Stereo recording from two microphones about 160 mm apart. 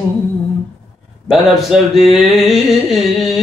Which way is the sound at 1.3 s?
Centre (ahead or behind).